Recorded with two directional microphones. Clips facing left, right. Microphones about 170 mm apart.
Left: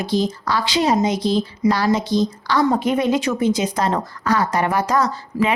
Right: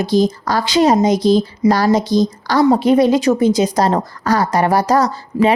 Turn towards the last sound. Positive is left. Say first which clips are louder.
# right 5 dB
turn(degrees=-40)  # may be behind; listen again after turning